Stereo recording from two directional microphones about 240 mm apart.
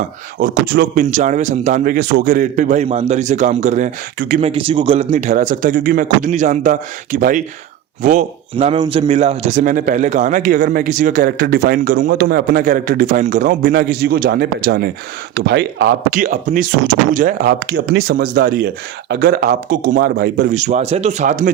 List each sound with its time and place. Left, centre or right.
0.3 s speech: right